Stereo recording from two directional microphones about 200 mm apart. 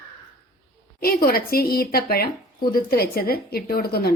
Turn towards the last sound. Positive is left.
turn(degrees=50)  # may be behind; listen again after turning